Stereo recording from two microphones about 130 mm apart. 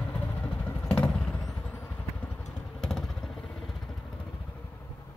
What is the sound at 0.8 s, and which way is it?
Vehicle, 5° left (ahead or behind).